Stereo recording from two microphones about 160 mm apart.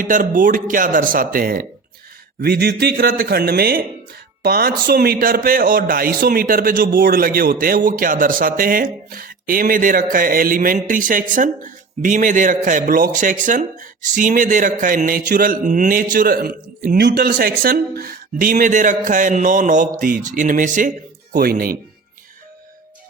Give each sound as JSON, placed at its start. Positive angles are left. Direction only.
{"t": 0.0, "sound": "a man's voice", "side_deg": -60}
{"t": 2.4, "sound": "a man's voice", "side_deg": -80}
{"t": 16.8, "sound": "a man's voice", "side_deg": -90}
{"t": 21.3, "sound": "a man's voice", "side_deg": -70}